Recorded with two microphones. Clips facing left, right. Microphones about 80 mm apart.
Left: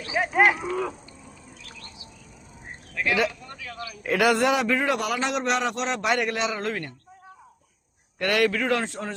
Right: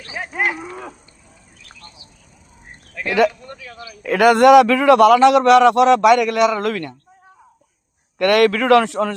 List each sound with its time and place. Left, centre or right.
0.0 s cattle: centre
3.2 s a man's voice: right
8.2 s a man's voice: right